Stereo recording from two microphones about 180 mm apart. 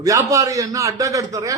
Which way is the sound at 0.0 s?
20° right (ahead or behind).